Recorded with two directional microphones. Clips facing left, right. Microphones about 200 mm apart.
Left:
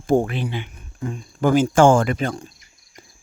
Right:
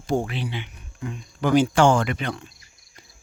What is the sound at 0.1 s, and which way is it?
Speech, 50° left (ahead or behind).